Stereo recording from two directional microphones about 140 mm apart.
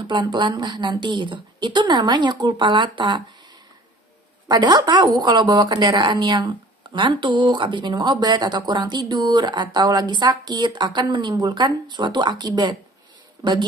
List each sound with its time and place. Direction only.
0.0 s a woman's voice: 35° right (ahead or behind)
4.5 s a woman's voice: 30° right (ahead or behind)